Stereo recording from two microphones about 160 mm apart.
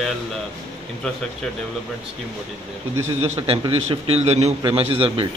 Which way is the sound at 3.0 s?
15° right (ahead or behind).